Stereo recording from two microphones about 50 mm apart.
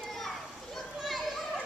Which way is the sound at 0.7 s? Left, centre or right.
Centre.